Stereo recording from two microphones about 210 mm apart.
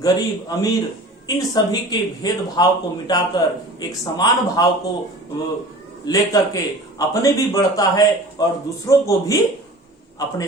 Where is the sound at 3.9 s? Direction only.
20° left (ahead or behind).